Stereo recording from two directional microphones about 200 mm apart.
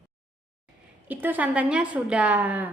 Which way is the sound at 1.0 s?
10° right (ahead or behind).